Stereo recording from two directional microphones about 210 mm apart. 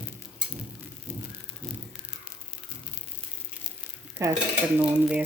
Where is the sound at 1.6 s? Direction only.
5° left (ahead or behind).